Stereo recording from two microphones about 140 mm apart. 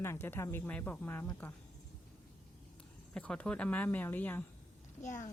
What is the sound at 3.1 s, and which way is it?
Speech, 10° left (ahead or behind).